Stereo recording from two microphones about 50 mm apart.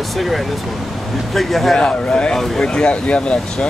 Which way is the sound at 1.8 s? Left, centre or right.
Centre.